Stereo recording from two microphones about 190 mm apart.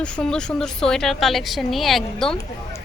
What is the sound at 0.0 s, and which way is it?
Speech, 5° left (ahead or behind).